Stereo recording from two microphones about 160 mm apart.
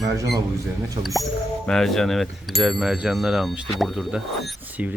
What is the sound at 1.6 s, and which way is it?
Speech, 5° left (ahead or behind).